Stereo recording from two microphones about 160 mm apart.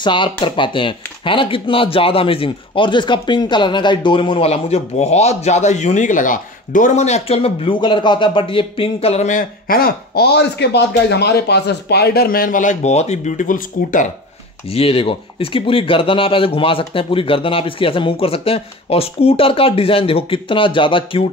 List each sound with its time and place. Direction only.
0.0 s speech: 30° left (ahead or behind); by 14.0 s 50° left (ahead or behind)
14.7 s speech: 35° left (ahead or behind)